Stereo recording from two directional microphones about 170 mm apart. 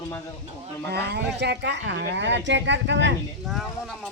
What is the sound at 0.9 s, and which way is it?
Speech, 80° right.